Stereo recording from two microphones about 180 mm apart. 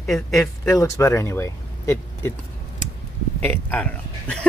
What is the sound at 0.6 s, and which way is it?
Speech, 15° left (ahead or behind).